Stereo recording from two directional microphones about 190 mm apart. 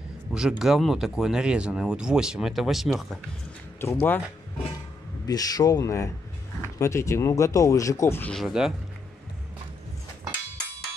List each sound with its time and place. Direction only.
0.3 s speech: 5° right (ahead or behind)
3.8 s speech: 10° left (ahead or behind)
5.2 s speech: 20° left (ahead or behind); by 8.7 s centre (ahead or behind)